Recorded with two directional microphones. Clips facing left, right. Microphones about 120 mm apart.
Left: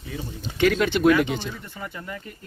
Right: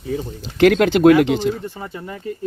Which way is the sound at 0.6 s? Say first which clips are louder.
Right 7 dB; 80° right.